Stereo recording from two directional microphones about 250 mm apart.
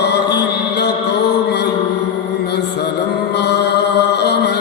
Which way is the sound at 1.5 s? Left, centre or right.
Left.